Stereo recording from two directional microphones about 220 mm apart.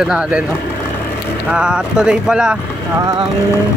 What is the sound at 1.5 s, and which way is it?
Speech, 5° right (ahead or behind).